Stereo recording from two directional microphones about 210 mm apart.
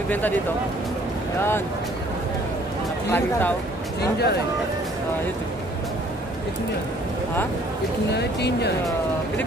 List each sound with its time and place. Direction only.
3.1 s speech: 10° left (ahead or behind)
4.0 s speech: 50° left (ahead or behind)
8.1 s speech: 55° left (ahead or behind)